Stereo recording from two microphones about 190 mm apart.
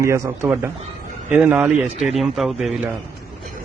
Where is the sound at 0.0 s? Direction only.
15° right (ahead or behind).